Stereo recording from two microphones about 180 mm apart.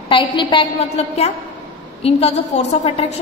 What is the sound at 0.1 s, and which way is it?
A woman's voice, 25° left (ahead or behind).